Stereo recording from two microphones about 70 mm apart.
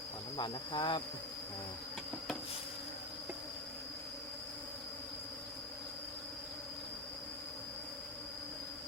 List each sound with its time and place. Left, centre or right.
0.3 s speech: left